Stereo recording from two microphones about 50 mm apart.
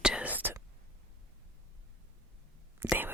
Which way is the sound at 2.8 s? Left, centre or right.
Right.